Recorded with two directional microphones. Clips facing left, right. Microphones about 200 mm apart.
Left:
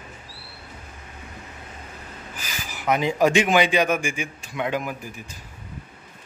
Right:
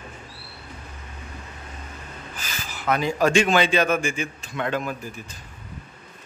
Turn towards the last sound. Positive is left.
turn(degrees=15)  # may be behind; listen again after turning